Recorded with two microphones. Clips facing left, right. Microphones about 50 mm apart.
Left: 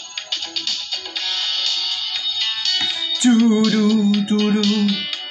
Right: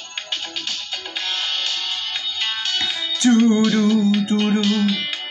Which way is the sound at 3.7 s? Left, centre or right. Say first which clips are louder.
Left 1 dB; centre.